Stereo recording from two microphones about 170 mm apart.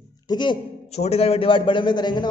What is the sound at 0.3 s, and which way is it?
Speech, 25° left (ahead or behind).